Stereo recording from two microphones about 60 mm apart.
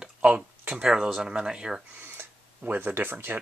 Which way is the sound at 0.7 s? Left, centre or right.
Centre.